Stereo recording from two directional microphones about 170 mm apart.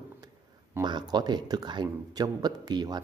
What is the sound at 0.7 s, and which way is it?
A man's voice, 25° right (ahead or behind).